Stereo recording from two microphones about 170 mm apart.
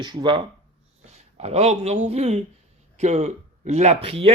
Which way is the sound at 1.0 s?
35° right (ahead or behind).